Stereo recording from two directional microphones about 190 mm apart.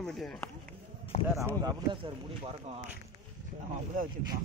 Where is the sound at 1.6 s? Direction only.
25° right (ahead or behind).